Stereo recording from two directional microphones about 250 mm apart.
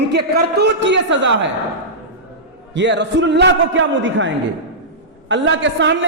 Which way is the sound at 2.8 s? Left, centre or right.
Right.